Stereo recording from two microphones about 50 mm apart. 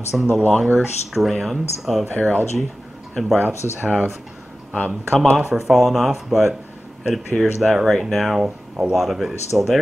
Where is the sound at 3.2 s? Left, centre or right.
Centre.